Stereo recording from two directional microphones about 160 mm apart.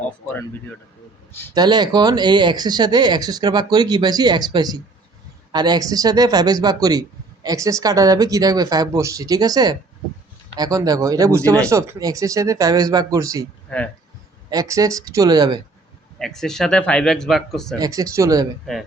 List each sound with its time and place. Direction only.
1.5 s speech: 25° right (ahead or behind)
13.7 s speech: 10° left (ahead or behind)
14.5 s speech: 20° right (ahead or behind)
16.1 s speech: centre (ahead or behind)
17.7 s speech: 20° right (ahead or behind)